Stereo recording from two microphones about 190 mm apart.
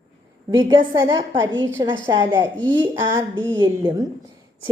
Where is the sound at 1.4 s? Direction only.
80° right.